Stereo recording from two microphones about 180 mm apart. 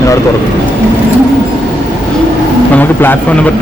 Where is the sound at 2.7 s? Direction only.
10° left (ahead or behind).